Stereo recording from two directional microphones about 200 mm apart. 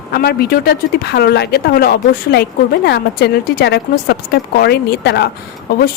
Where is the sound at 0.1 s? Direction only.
50° left (ahead or behind).